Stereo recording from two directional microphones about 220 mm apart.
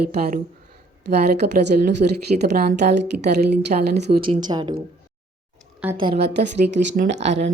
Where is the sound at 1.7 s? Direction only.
45° right (ahead or behind).